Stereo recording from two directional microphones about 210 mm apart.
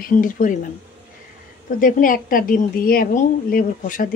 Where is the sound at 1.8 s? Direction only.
40° left (ahead or behind).